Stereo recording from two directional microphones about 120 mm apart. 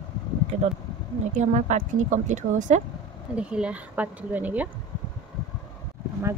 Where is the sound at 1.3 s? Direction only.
75° right (ahead or behind).